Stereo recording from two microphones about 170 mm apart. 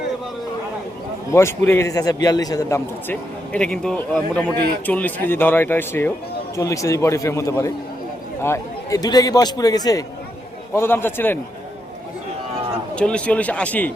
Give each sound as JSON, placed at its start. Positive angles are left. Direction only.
{"t": 1.3, "sound": "a man's voice", "side_deg": 15}
{"t": 13.0, "sound": "a man's voice", "side_deg": 5}